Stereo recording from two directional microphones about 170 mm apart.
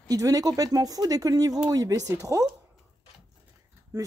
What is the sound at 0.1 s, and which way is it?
Speech, 20° right (ahead or behind).